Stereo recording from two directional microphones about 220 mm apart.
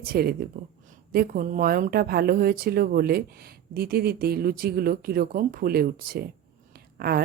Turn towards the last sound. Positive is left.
turn(degrees=-45)  # may be behind; listen again after turning